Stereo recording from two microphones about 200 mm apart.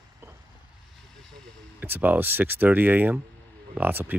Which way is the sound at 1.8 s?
10° right (ahead or behind).